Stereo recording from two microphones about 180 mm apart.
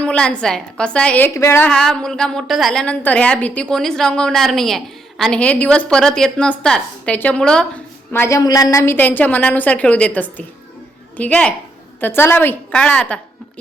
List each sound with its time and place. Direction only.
0.0 s a woman's voice: 5° left (ahead or behind)
8.1 s a woman's voice: 15° left (ahead or behind)